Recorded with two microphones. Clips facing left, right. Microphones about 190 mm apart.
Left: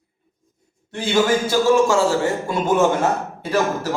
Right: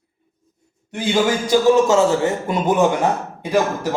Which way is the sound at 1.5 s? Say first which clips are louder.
Right 2 dB; 20° right (ahead or behind).